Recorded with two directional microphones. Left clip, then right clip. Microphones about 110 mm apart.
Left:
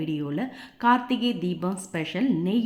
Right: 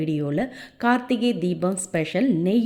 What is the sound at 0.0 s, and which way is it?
A woman's voice, 50° right (ahead or behind).